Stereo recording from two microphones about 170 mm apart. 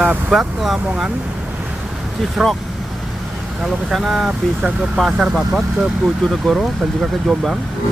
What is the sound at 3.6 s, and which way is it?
Speech, centre (ahead or behind).